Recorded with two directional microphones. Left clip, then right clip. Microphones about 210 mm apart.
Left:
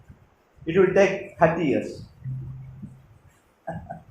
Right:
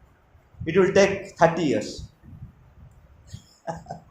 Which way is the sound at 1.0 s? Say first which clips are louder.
Right 1 dB; 35° right (ahead or behind).